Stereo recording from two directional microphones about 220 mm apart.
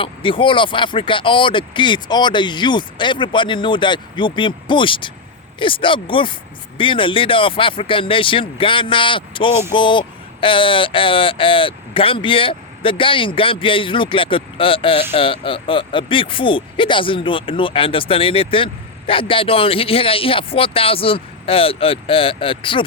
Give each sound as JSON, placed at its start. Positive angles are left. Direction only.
{"t": 0.0, "sound": "speech", "side_deg": 25}